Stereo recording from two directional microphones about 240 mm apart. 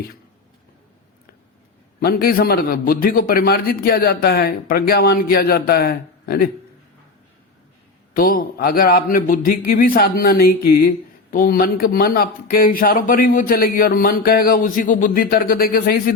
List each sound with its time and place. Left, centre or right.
2.0 s speech: left
8.1 s speech: left